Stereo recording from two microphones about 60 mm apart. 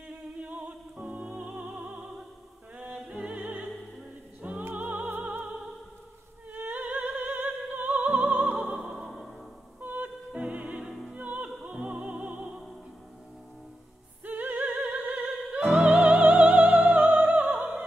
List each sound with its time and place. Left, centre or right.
0.1 s music: right
3.3 s opera: right
4.4 s music: centre
6.5 s opera: right
8.7 s music: centre
9.8 s music: right
10.9 s opera: centre
11.1 s music: right
14.2 s opera: right
15.7 s music: right